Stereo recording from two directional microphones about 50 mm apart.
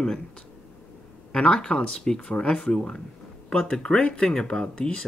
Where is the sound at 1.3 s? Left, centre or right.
Centre.